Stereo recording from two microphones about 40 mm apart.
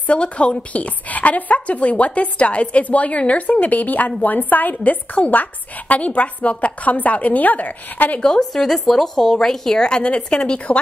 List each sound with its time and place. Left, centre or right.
0.0 s a woman's voice: left
8.2 s speech: centre